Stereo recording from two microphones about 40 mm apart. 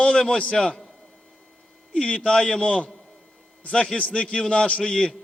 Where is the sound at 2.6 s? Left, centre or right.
Left.